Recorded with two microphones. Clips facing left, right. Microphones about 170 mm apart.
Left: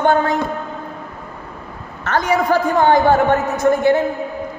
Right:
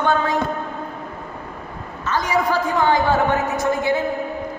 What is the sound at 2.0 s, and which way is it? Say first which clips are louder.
A woman's voice: left 4 dB; 60° left (ahead or behind).